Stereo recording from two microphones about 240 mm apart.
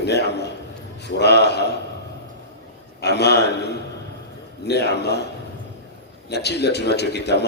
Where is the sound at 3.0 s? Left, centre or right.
Left.